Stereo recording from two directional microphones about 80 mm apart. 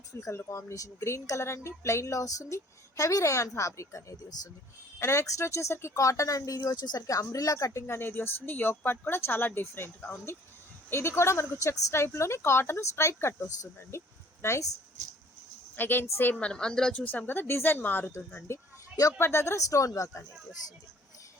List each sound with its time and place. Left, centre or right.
0.1 s speech: left
6.7 s speech: left
7.1 s speech: left
15.7 s speech: left
16.4 s speech: centre; by 20.2 s left